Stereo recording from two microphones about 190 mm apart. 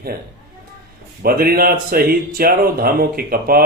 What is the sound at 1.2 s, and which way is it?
Speech, 50° right (ahead or behind).